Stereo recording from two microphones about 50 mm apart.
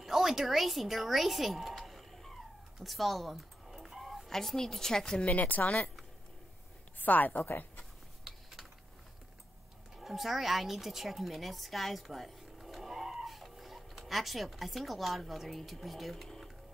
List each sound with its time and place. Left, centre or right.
0.0 s speech: centre
5.2 s a woman's voice: left
7.0 s a woman's voice: left
8.2 s mechanisms: centre
9.9 s speech: centre